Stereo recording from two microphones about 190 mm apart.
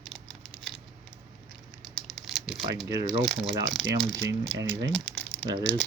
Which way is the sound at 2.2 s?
Centre (ahead or behind).